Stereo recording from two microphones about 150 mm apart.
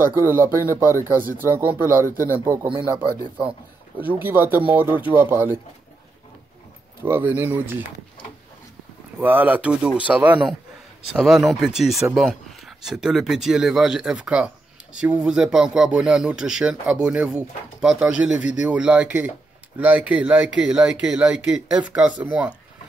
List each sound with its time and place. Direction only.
0.2 s speech: 15° right (ahead or behind)
4.0 s speech: 10° right (ahead or behind)
7.0 s speech: 15° right (ahead or behind)
9.2 s speech: 10° right (ahead or behind)